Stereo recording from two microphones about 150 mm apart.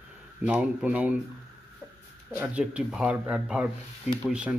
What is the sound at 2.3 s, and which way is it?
Speech, 5° right (ahead or behind).